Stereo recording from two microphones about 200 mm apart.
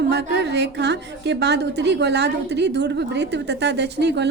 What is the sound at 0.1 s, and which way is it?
A woman's voice, 60° right (ahead or behind).